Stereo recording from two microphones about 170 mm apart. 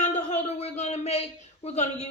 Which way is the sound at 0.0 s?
45° left (ahead or behind).